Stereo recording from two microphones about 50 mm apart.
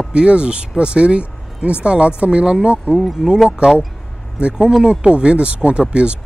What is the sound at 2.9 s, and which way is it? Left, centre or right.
Speech, centre.